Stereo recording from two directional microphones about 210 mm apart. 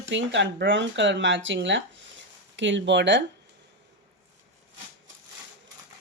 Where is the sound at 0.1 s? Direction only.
60° right (ahead or behind).